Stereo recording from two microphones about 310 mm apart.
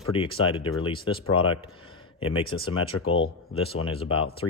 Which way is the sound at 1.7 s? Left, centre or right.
Centre.